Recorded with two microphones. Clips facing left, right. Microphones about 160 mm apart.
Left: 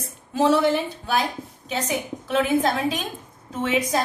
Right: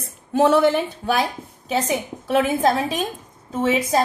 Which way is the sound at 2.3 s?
40° right (ahead or behind).